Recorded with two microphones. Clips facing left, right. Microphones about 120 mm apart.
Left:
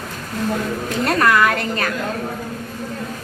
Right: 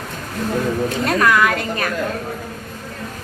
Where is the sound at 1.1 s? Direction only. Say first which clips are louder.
Left 1 dB; centre (ahead or behind).